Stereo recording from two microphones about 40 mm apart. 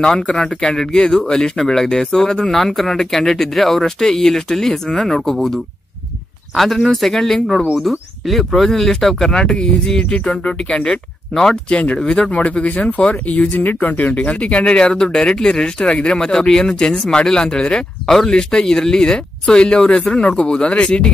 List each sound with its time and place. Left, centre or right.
0.4 s speech: centre
2.5 s speech: centre
7.7 s speech: centre
9.4 s speech: centre; by 13.6 s left
13.6 s speech: left